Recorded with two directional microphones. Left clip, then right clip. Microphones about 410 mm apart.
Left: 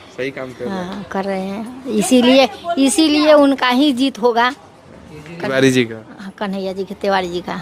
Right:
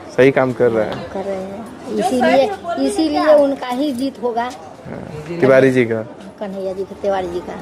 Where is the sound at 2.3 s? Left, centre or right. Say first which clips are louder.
Even; left.